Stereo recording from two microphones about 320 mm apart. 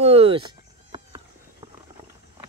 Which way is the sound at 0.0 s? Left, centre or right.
Centre.